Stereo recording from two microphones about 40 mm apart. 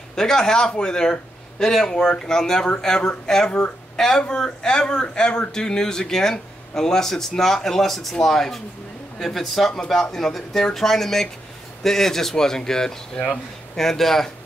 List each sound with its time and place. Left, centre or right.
0.1 s a man's voice: centre